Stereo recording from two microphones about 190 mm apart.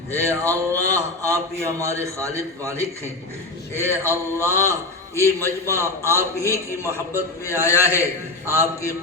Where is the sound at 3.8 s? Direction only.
10° left (ahead or behind).